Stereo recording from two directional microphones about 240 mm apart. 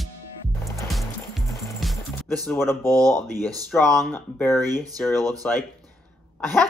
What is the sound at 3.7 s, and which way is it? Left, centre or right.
Speech, centre.